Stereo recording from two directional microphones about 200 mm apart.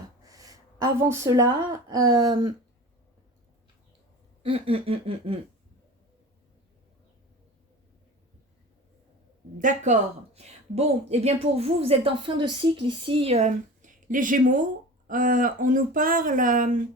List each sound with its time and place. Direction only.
0.2 s speech: 15° right (ahead or behind)
4.4 s a sound: 30° right (ahead or behind)
9.6 s a woman's voice: 40° right (ahead or behind)